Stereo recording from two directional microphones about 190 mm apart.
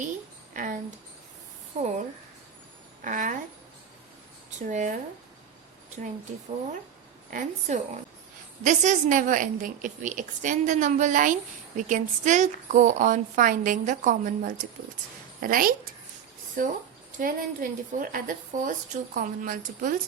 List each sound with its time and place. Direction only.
0.5 s speech: 45° right (ahead or behind)
1.7 s a woman's voice: 35° right (ahead or behind)
3.0 s a woman's voice: 45° right (ahead or behind)
4.6 s a woman's voice: 40° right (ahead or behind)
7.3 s a woman's voice: 45° right (ahead or behind)